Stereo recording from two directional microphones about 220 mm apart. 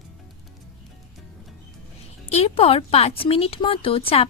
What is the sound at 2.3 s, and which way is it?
Speech, 25° left (ahead or behind).